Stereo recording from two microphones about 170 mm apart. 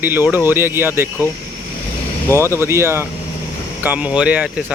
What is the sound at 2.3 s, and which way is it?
Speech, 15° right (ahead or behind).